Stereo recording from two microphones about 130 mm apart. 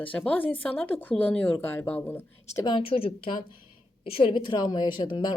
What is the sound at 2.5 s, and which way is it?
Speech, 35° left (ahead or behind).